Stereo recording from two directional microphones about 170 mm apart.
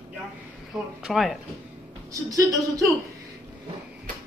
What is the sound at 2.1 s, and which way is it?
Speech, 20° right (ahead or behind).